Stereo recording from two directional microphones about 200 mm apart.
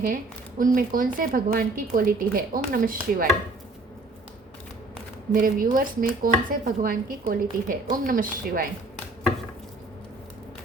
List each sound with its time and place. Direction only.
0.6 s a woman's voice: 45° right (ahead or behind)
5.3 s a woman's voice: 45° right (ahead or behind)